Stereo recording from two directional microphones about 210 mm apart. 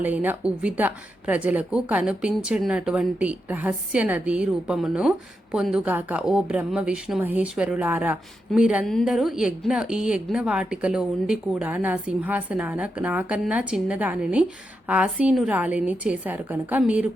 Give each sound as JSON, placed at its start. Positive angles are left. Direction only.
{"t": 0.0, "sound": "a woman's voice", "side_deg": -10}